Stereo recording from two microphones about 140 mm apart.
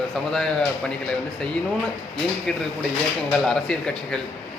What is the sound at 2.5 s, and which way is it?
A man's voice, 5° left (ahead or behind).